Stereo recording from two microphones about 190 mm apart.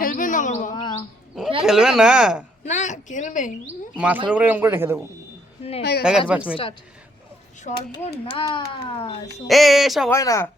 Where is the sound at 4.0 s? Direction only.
5° right (ahead or behind).